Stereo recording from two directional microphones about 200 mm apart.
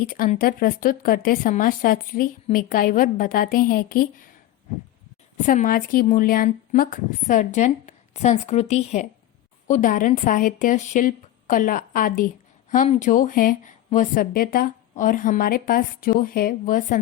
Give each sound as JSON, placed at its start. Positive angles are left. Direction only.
{"t": 0.0, "sound": "speech", "side_deg": 45}
{"t": 5.5, "sound": "a woman's voice", "side_deg": 45}